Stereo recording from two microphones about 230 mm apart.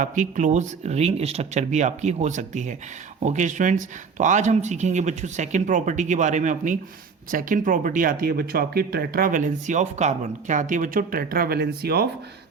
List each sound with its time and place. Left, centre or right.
0.0 s speech: right